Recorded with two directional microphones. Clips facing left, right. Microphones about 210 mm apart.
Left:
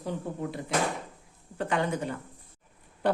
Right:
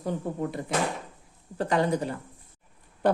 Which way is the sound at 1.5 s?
35° right (ahead or behind).